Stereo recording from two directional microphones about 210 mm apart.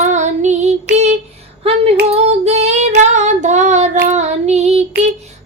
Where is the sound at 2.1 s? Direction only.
30° right (ahead or behind).